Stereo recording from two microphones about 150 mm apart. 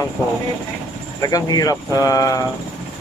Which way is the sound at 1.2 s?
25° left (ahead or behind).